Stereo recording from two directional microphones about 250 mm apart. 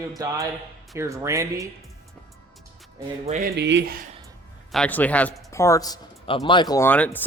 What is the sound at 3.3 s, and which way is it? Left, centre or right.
Speech, right.